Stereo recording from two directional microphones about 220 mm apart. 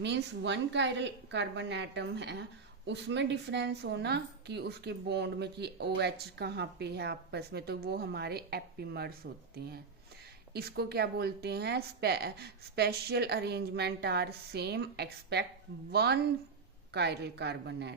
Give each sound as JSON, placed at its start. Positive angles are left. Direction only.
{"t": 0.0, "sound": "a woman's voice", "side_deg": -50}
{"t": 10.5, "sound": "a woman's voice", "side_deg": -45}